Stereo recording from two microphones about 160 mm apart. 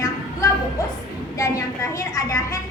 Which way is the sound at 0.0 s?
20° left (ahead or behind).